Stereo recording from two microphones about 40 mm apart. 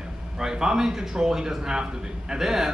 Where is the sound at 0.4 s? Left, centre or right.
Centre.